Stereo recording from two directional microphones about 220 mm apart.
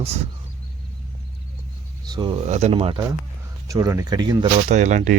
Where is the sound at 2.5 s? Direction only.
30° right (ahead or behind).